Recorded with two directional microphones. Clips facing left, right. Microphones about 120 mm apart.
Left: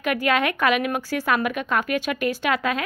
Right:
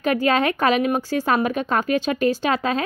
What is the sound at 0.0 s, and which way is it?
A woman's voice, 30° right (ahead or behind).